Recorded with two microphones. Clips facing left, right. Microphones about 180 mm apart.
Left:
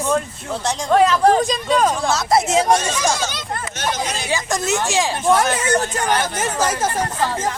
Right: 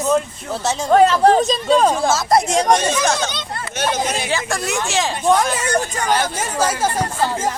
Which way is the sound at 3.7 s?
55° right (ahead or behind).